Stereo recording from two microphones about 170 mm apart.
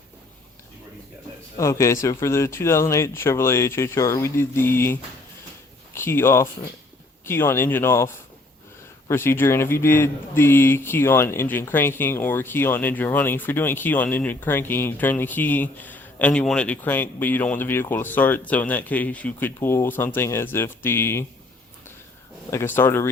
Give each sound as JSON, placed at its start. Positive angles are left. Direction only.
{"t": 1.5, "sound": "speech", "side_deg": 15}
{"t": 22.4, "sound": "speech", "side_deg": 15}